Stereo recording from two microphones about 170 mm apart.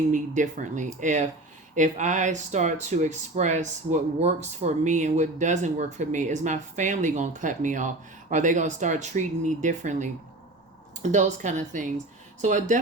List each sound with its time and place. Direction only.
0.1 s speech: 45° right (ahead or behind)